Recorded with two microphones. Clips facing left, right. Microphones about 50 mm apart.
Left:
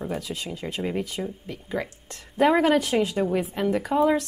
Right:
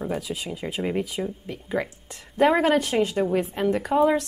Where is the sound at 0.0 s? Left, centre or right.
Centre.